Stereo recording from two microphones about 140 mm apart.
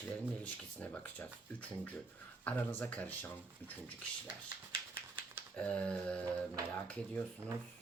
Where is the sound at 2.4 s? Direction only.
15° left (ahead or behind).